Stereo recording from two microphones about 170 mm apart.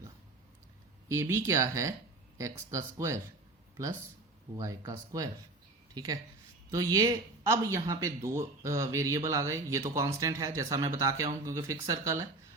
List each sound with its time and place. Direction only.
1.0 s speech: 15° right (ahead or behind)
4.5 s speech: 20° right (ahead or behind)